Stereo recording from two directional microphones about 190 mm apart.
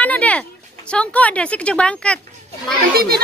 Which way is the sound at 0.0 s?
10° left (ahead or behind).